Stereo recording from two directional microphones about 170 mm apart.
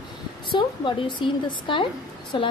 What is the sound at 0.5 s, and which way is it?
A woman's voice, 25° left (ahead or behind).